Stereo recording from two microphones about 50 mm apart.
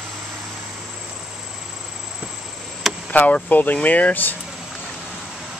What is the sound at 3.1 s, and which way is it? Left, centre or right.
Speech, left.